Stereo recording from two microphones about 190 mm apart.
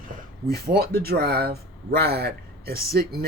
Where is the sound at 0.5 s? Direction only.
55° right (ahead or behind).